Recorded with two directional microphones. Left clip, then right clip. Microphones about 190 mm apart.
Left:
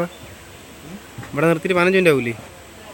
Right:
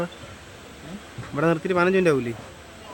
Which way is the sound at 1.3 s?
20° left (ahead or behind).